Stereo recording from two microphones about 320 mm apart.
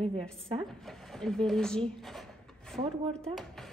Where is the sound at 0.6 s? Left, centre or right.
Centre.